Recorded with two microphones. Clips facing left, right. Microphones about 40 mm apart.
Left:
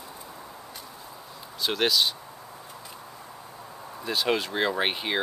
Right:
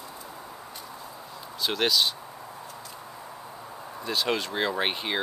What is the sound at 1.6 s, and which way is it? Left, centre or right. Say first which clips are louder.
Speech: even; centre.